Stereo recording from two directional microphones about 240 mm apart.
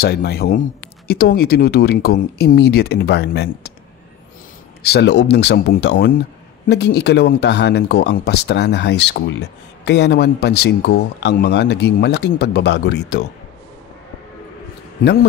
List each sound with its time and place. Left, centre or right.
0.0 s speech: left
4.8 s speech: left